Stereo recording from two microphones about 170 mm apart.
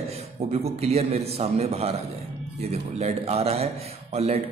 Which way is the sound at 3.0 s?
40° right (ahead or behind).